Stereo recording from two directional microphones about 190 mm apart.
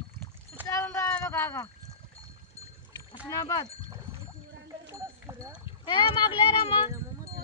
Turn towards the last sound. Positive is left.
turn(degrees=25)  # may be behind; listen again after turning